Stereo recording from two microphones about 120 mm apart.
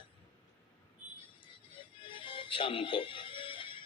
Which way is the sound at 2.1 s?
45° left (ahead or behind).